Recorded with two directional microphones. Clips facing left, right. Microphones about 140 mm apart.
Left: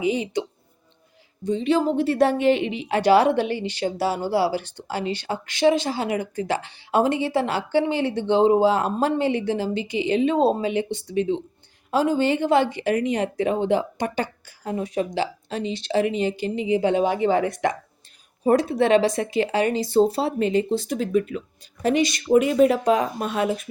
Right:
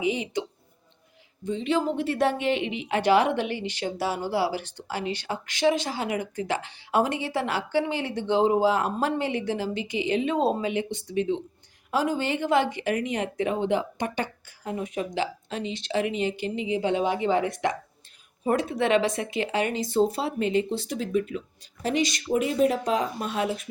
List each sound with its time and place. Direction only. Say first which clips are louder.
0.0 s speech: left 4 dB; 35° left (ahead or behind)
1.5 s speech: left 5 dB; 35° left (ahead or behind)
16.8 s a woman's voice: left 3 dB; 50° left (ahead or behind)